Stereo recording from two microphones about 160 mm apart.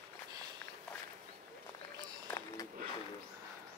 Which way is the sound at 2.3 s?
20° left (ahead or behind).